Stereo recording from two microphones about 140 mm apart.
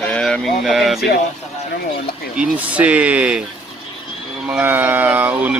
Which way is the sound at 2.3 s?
10° right (ahead or behind).